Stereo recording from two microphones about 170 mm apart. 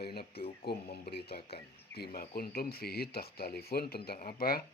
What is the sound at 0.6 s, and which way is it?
Speech, 70° left (ahead or behind).